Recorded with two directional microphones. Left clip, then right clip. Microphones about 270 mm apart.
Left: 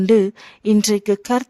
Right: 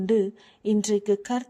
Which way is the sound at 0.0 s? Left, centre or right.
Left.